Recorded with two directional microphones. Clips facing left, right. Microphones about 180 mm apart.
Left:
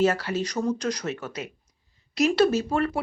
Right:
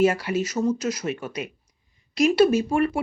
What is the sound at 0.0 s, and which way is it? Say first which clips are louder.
Speech: right 2 dB; 10° right (ahead or behind).